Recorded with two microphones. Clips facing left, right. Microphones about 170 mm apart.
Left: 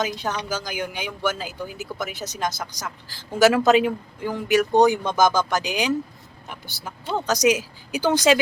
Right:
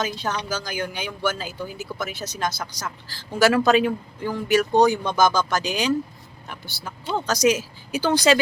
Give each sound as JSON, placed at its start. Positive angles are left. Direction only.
{"t": 0.0, "sound": "speech", "side_deg": 15}